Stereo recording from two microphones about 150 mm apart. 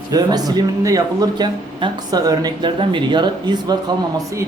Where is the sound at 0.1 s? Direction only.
25° right (ahead or behind).